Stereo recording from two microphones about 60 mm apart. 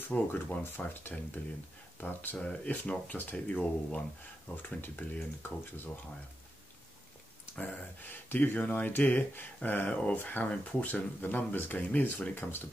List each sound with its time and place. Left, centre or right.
0.1 s speech: left
7.6 s speech: left